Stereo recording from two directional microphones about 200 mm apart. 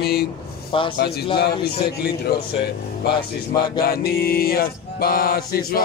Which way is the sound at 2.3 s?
50° left (ahead or behind).